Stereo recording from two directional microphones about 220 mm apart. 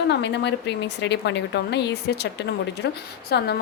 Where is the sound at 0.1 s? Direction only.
50° left (ahead or behind).